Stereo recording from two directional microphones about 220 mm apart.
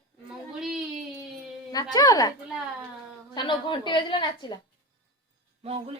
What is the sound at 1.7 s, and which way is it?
Speech, 15° left (ahead or behind).